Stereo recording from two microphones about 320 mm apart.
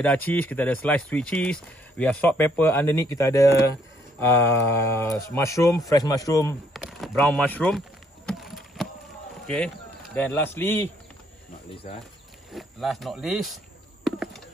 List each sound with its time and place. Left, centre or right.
0.0 s speech: centre
8.3 s a sound: centre
9.5 s a man's voice: centre
12.4 s speech: centre